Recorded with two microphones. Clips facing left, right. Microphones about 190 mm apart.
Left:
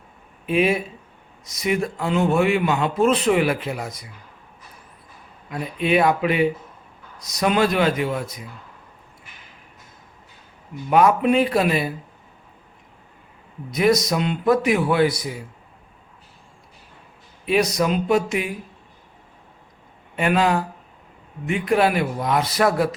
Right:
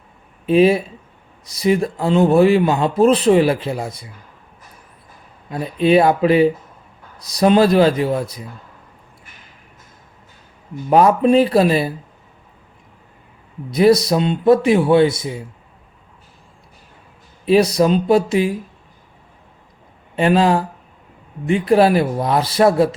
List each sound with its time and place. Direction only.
0.4 s a man's voice: 30° right (ahead or behind)
5.5 s a man's voice: 30° right (ahead or behind)
10.8 s a man's voice: 35° right (ahead or behind)
13.7 s speech: 30° right (ahead or behind)
17.4 s a man's voice: 30° right (ahead or behind)
20.1 s a man's voice: 30° right (ahead or behind)